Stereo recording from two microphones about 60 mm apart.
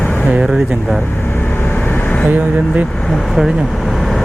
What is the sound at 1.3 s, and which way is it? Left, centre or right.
Vehicle, left.